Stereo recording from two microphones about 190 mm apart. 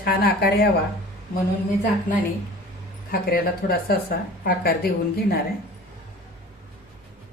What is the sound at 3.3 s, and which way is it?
Speech, 50° left (ahead or behind).